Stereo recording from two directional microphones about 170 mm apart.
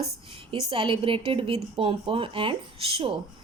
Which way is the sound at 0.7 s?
30° right (ahead or behind).